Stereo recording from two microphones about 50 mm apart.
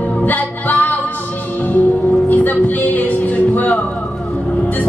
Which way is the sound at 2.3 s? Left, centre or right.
Left.